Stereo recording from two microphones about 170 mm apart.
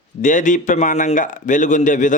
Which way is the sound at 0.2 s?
50° left (ahead or behind).